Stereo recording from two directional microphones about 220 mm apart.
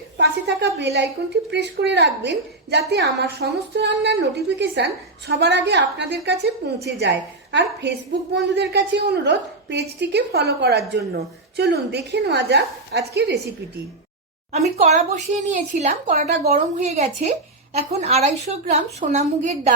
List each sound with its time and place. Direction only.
0.2 s a sound: 50° right (ahead or behind)
1.5 s a woman's voice: 50° right (ahead or behind)
14.5 s a woman's voice: 30° right (ahead or behind)